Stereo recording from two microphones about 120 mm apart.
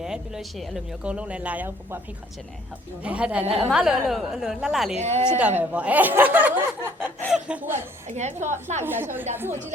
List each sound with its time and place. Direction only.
0.0 s speech: 5° right (ahead or behind)
3.0 s a woman's voice: 10° right (ahead or behind)
4.9 s a woman's voice: 70° right (ahead or behind)
5.5 s speech: 10° right (ahead or behind)
7.3 s snicker: 5° right (ahead or behind)
8.0 s a woman's voice: 75° right (ahead or behind)
8.8 s speech: 20° right (ahead or behind)